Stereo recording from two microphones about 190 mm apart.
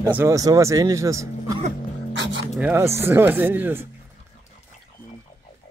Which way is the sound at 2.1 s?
75° right (ahead or behind).